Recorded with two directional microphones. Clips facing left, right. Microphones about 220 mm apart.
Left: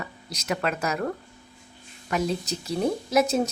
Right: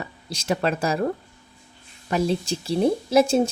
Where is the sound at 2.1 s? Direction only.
30° right (ahead or behind).